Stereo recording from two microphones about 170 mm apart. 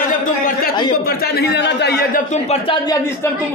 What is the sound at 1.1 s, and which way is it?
A man's voice, 70° left (ahead or behind).